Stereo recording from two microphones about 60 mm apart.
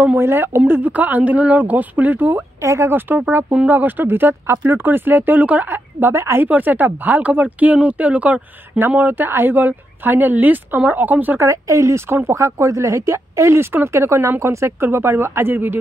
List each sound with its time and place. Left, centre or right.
0.2 s speech: right
2.6 s speech: right
2.9 s speech: right
6.1 s speech: right
6.4 s speech: right
8.7 s speech: right
11.3 s speech: right